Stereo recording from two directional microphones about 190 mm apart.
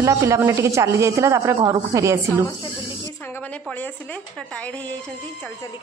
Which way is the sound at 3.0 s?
10° left (ahead or behind).